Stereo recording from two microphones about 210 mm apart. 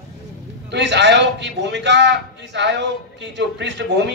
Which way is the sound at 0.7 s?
55° right (ahead or behind).